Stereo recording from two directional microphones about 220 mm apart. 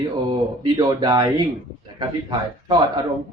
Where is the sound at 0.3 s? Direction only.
20° right (ahead or behind).